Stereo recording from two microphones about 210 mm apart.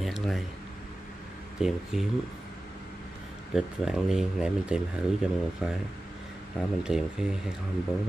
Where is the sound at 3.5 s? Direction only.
Centre (ahead or behind).